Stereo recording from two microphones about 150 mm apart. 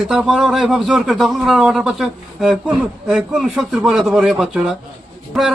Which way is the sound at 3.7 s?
Centre (ahead or behind).